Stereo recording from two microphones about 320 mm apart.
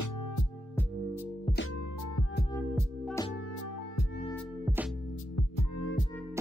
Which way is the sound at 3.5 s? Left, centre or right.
Left.